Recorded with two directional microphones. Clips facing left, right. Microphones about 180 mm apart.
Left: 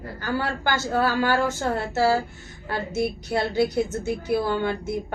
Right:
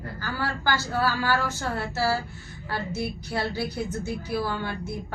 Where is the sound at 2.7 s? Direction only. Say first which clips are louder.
Left 4 dB; 25° left (ahead or behind).